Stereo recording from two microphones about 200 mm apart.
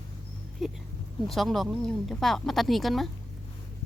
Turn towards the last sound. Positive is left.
turn(degrees=0)  # may be behind; listen again after turning